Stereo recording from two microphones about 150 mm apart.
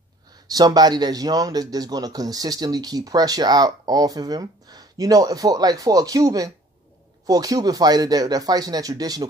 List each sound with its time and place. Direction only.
0.5 s speech: 25° right (ahead or behind)